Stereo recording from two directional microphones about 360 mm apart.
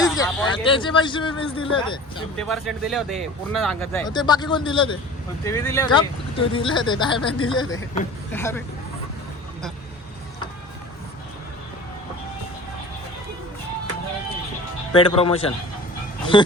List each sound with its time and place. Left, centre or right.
0.0 s a sound: centre
0.6 s speech: centre
2.5 s speech: centre
14.9 s speech: centre